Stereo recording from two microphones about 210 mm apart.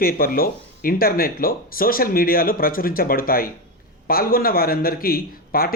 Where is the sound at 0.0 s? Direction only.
45° left (ahead or behind).